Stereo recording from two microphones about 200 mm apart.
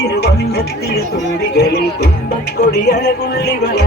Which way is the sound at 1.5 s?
55° left (ahead or behind).